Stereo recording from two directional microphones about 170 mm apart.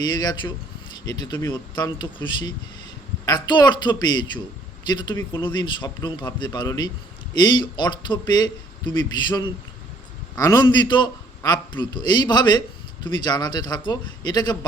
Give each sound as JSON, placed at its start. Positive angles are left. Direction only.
{"t": 0.0, "sound": "a man's voice", "side_deg": 25}
{"t": 3.2, "sound": "a man's voice", "side_deg": 25}